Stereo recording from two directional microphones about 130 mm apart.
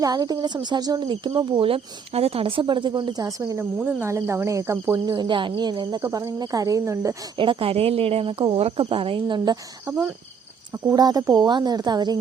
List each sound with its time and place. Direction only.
0.0 s speech: 30° right (ahead or behind)
5.1 s speech: 40° right (ahead or behind)
6.0 s speech: 20° right (ahead or behind)
7.3 s speech: 45° right (ahead or behind)
10.8 s speech: 30° right (ahead or behind)